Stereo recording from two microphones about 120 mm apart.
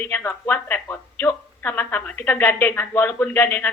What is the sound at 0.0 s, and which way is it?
A woman's voice, 15° left (ahead or behind).